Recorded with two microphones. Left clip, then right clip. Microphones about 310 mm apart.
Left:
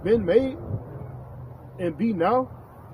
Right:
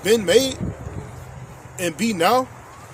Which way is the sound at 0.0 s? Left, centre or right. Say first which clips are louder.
Right 4 dB; right.